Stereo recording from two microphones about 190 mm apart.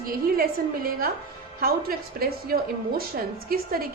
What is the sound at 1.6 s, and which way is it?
A woman's voice, 50° right (ahead or behind).